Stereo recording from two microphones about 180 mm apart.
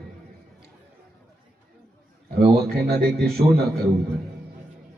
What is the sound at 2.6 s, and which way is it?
Speech, 60° right (ahead or behind).